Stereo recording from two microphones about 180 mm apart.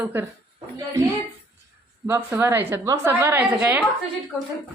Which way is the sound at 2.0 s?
15° right (ahead or behind).